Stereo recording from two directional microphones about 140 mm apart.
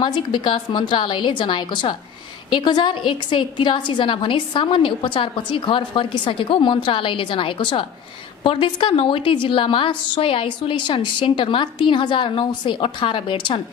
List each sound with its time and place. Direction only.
0.0 s a woman's voice: 35° left (ahead or behind)